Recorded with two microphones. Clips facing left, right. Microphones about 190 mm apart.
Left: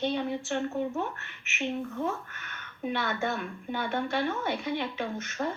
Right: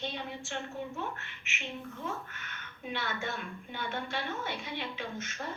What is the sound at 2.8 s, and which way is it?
A woman's voice, 55° left (ahead or behind).